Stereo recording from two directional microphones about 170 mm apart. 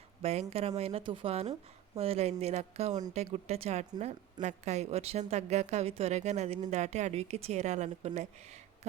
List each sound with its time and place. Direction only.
0.2 s a woman's voice: 35° right (ahead or behind)